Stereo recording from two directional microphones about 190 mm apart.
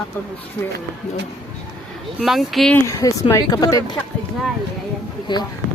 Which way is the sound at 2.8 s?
15° left (ahead or behind).